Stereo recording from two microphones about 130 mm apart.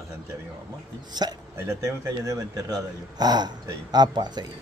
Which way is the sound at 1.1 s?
30° right (ahead or behind).